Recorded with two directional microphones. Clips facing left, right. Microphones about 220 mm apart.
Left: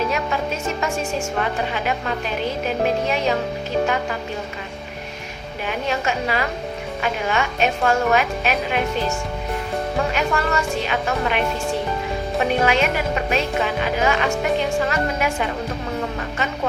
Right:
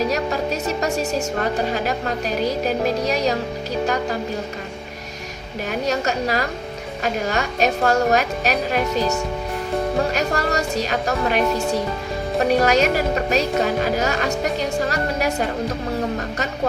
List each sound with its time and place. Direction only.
0.0 s a woman's voice: 40° right (ahead or behind)
5.6 s speech: 40° right (ahead or behind)